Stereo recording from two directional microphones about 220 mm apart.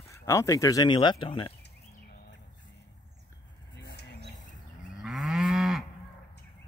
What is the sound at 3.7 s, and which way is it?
Vehicle, 50° left (ahead or behind).